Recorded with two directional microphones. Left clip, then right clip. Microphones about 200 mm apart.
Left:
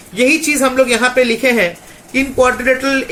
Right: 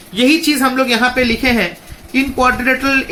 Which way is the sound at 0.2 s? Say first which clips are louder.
Even; 50° right (ahead or behind).